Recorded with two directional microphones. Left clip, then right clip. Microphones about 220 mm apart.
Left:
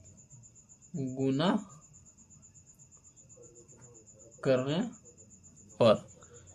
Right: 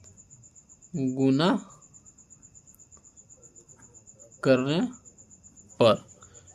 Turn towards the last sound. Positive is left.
turn(degrees=-40)  # may be behind; listen again after turning